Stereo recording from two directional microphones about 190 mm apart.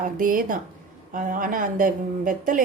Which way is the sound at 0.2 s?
45° right (ahead or behind).